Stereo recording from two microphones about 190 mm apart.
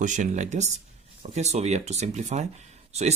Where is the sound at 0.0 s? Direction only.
40° right (ahead or behind).